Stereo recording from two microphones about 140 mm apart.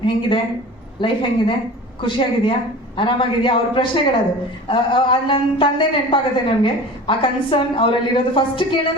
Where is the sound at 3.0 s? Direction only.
40° left (ahead or behind).